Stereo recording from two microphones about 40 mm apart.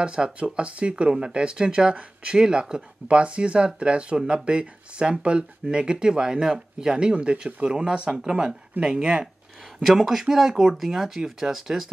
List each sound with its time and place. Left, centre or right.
0.0 s speech: right
8.7 s speech: right
9.8 s speech: centre